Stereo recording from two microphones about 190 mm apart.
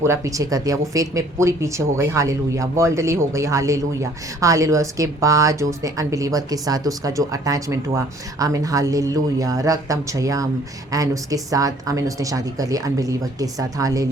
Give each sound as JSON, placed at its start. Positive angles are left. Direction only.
{"t": 0.0, "sound": "speech", "side_deg": -15}